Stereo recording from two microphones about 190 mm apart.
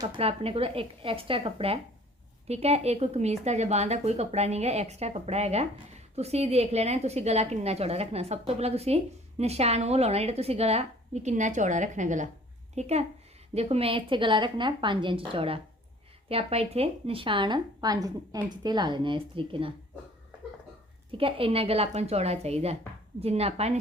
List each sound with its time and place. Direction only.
0.0 s a woman's voice: 30° right (ahead or behind)
21.1 s a woman's voice: 30° right (ahead or behind)